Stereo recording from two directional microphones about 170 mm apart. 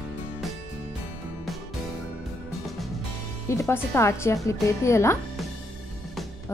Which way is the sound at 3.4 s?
15° left (ahead or behind).